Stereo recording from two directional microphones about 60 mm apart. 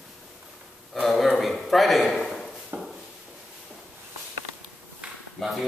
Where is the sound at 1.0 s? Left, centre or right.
Centre.